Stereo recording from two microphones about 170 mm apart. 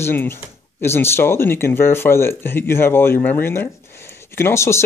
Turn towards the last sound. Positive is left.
turn(degrees=15)  # may be behind; listen again after turning